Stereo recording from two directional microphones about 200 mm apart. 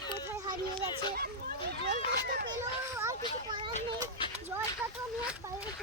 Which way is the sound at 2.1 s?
50° right (ahead or behind).